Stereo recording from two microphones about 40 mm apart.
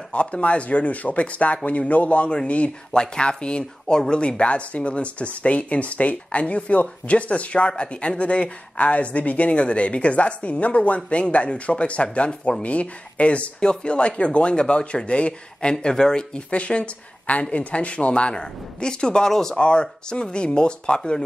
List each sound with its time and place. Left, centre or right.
0.1 s speech: left
2.9 s speech: left
15.7 s speech: centre
18.3 s speech: centre
19.6 s speech: left